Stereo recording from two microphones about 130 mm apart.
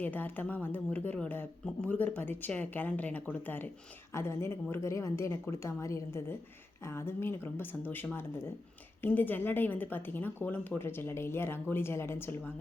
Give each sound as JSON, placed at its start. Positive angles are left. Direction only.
{"t": 0.0, "sound": "a woman's voice", "side_deg": 15}